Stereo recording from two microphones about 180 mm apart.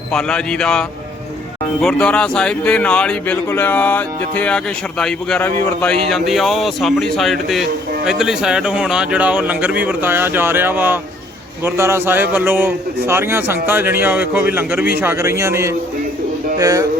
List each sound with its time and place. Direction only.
0.1 s a man's voice: 5° left (ahead or behind); by 16.8 s 20° right (ahead or behind)